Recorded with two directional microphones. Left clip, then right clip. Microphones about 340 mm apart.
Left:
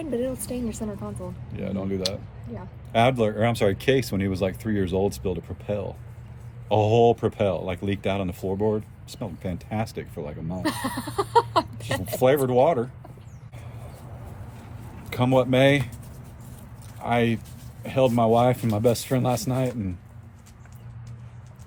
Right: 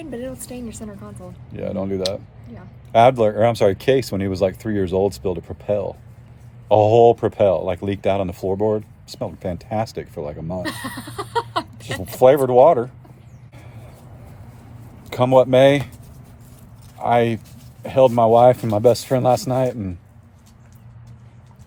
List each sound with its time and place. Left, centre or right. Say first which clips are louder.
0.0 s speech: left 3 dB; centre
1.5 s speech: right 6 dB; centre
10.6 s a sound: even; centre
11.9 s speech: right 7 dB; centre
15.1 s speech: right 8 dB; centre
17.0 s speech: right 7 dB; centre